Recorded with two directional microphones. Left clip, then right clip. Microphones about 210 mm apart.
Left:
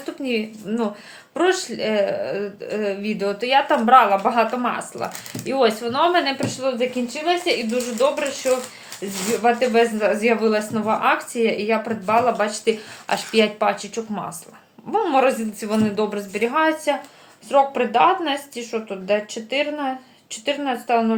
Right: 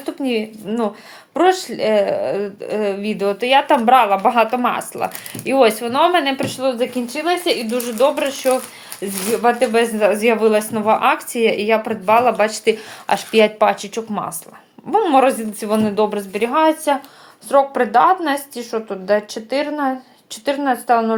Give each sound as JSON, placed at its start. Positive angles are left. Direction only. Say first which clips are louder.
{"t": 0.0, "sound": "speech", "louder": "right 4 dB", "side_deg": -35}
{"t": 9.4, "sound": "speech", "louder": "right 2 dB", "side_deg": -45}